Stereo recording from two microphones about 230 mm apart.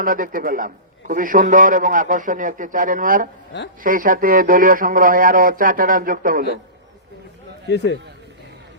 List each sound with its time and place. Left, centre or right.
0.0 s a man's voice: right